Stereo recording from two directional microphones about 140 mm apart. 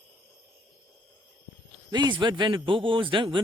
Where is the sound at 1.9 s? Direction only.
30° right (ahead or behind).